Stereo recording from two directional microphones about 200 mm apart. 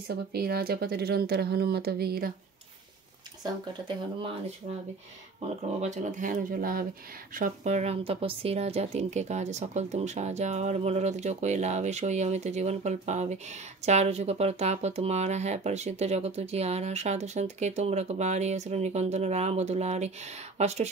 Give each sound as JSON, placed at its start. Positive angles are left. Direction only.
{"t": 0.1, "sound": "speech", "side_deg": -50}
{"t": 5.8, "sound": "speech", "side_deg": -35}